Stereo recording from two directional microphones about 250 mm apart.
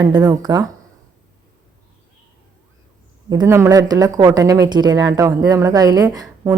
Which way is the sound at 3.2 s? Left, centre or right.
Centre.